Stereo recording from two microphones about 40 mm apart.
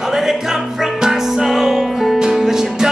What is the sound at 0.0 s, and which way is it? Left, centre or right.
Music, centre.